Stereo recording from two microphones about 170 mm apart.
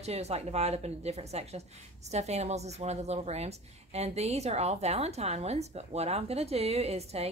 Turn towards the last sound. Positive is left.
turn(degrees=-40)  # may be behind; listen again after turning